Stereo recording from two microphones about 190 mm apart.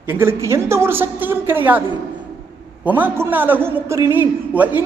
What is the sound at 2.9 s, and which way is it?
A man's voice, 10° right (ahead or behind).